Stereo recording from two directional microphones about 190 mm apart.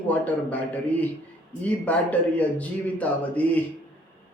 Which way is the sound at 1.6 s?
5° left (ahead or behind).